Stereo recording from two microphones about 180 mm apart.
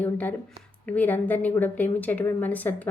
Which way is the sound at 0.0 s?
10° left (ahead or behind).